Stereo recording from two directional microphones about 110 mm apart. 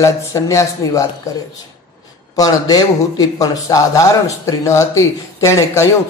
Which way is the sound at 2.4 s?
35° left (ahead or behind).